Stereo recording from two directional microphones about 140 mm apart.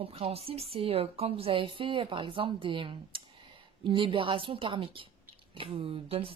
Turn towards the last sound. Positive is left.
turn(degrees=-40)  # may be behind; listen again after turning